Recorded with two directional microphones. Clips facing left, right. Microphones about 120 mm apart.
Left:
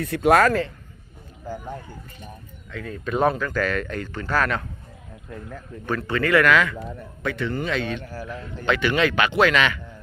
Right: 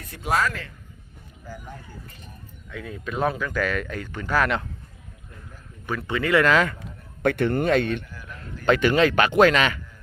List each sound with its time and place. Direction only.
0.0 s a man's voice: 70° left (ahead or behind)
2.6 s speech: 10° right (ahead or behind)
3.1 s speech: centre (ahead or behind)
5.8 s speech: 10° right (ahead or behind)
7.2 s a man's voice: 60° right (ahead or behind)
8.0 s a man's voice: 40° left (ahead or behind)
8.6 s speech: 40° right (ahead or behind)